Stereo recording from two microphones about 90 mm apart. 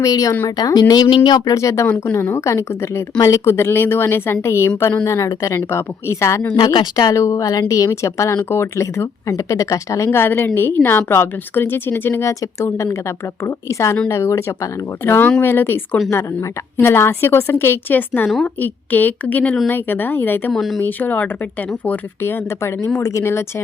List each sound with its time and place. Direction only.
0.0 s speech: 40° left (ahead or behind)
1.5 s a woman's voice: 35° left (ahead or behind)
20.5 s speech: centre (ahead or behind)
20.8 s a woman's voice: 20° left (ahead or behind)